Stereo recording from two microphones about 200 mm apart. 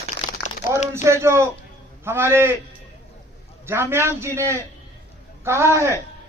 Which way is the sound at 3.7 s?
10° right (ahead or behind).